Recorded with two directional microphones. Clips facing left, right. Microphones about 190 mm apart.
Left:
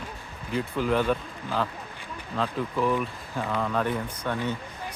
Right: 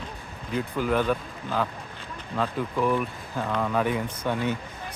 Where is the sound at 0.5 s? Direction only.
Centre (ahead or behind).